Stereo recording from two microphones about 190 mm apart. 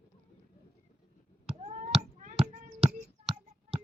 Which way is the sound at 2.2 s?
40° right (ahead or behind).